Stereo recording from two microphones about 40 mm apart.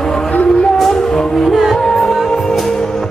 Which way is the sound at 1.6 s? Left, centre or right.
Centre.